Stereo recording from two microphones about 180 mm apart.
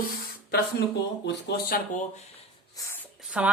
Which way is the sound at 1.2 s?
70° left (ahead or behind).